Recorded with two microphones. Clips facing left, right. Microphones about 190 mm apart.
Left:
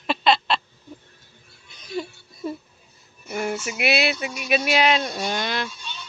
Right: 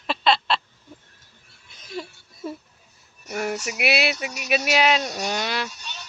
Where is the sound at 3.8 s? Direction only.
5° right (ahead or behind).